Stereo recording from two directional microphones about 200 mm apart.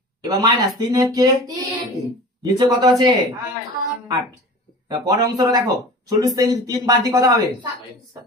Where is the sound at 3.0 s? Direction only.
20° right (ahead or behind).